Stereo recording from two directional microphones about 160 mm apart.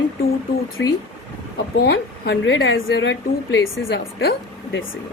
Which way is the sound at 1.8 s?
90° left.